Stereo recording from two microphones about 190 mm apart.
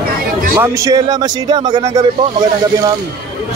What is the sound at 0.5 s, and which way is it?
Speech, 20° right (ahead or behind).